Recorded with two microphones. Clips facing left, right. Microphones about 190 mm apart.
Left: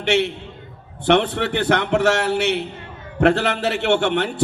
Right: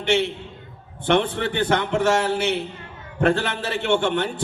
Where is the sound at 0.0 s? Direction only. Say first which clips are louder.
Left 2 dB; 70° left (ahead or behind).